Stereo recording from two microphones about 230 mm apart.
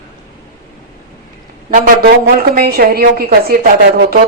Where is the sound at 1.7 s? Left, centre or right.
Right.